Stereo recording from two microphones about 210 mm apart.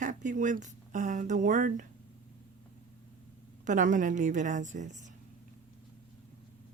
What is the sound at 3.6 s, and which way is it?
Speech, 35° right (ahead or behind).